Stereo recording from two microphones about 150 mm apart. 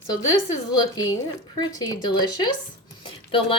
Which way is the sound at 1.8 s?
30° left (ahead or behind).